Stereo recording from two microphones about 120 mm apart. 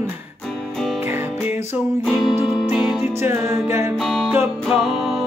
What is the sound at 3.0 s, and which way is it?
Music, 20° right (ahead or behind).